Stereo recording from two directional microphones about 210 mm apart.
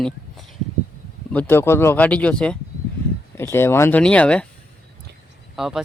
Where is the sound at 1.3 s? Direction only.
10° left (ahead or behind).